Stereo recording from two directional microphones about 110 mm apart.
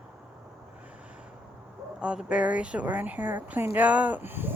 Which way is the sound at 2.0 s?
10° right (ahead or behind).